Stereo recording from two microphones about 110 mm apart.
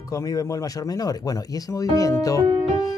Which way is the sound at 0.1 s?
35° left (ahead or behind).